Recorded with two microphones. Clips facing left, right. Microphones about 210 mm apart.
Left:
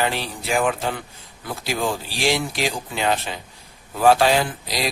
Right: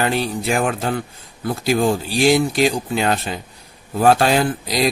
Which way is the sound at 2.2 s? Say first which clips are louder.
Right 7 dB; 45° right (ahead or behind).